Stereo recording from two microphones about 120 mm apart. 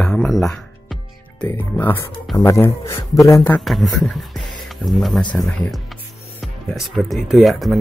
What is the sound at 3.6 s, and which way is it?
Speech, centre (ahead or behind).